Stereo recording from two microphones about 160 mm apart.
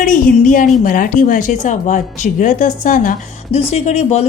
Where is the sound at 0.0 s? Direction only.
55° left (ahead or behind).